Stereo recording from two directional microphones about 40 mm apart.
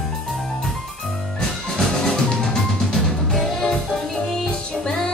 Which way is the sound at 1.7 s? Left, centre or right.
Centre.